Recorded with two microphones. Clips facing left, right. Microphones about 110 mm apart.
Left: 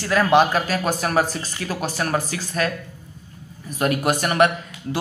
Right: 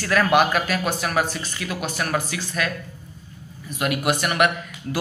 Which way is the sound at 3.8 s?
40° left (ahead or behind).